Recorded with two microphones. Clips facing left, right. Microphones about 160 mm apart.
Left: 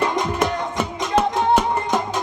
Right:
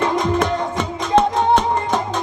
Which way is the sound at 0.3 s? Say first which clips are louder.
Right 2 dB; 10° left (ahead or behind).